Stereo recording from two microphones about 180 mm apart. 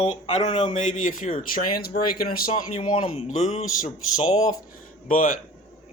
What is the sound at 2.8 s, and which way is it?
Speech, 35° left (ahead or behind).